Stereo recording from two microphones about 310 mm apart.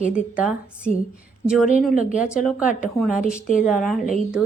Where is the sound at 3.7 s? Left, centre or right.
Centre.